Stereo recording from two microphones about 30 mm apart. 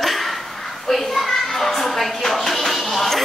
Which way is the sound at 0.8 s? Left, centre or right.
Centre.